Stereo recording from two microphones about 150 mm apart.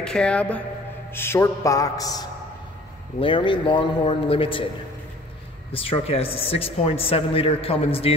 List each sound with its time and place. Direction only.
0.0 s a man's voice: 5° left (ahead or behind); by 2.2 s 25° left (ahead or behind)
3.2 s speech: 35° left (ahead or behind)
5.7 s speech: 40° left (ahead or behind)